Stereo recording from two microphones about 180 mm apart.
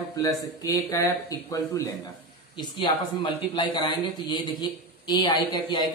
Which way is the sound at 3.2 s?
25° left (ahead or behind).